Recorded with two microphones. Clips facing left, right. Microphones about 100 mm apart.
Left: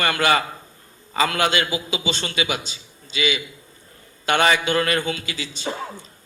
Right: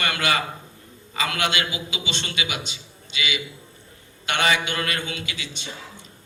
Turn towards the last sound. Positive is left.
turn(degrees=45)  # may be behind; listen again after turning